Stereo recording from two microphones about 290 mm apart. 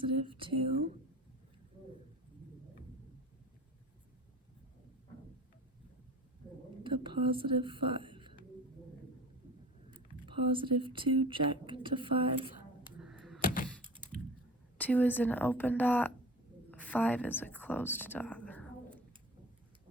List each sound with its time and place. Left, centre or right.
0.3 s speech: centre
6.9 s whispering: centre
10.2 s speech: centre
13.0 s a sound: centre
13.4 s computer keyboard: left
14.8 s a woman's voice: centre